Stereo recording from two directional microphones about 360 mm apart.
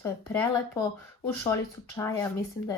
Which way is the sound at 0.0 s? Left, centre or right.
Centre.